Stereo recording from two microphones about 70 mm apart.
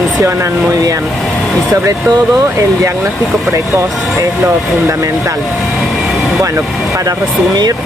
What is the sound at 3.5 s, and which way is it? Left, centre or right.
Speech, right.